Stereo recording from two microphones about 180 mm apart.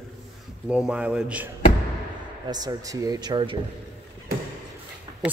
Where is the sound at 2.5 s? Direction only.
20° right (ahead or behind).